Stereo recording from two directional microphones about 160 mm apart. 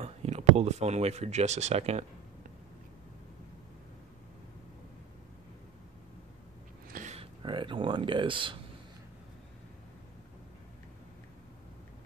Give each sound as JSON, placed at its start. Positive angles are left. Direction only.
{"t": 0.0, "sound": "speech", "side_deg": -45}
{"t": 6.9, "sound": "a sound", "side_deg": -55}
{"t": 7.2, "sound": "speech", "side_deg": -30}